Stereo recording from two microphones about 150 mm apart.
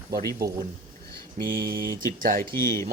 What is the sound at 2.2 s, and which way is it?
Speech, 60° right (ahead or behind).